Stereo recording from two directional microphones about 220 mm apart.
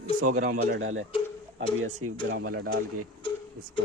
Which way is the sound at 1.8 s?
85° right.